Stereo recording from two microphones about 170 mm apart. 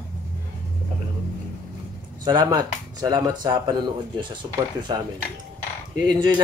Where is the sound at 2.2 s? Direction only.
25° right (ahead or behind).